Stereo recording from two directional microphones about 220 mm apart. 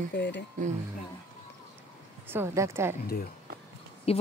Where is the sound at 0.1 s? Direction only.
55° left (ahead or behind).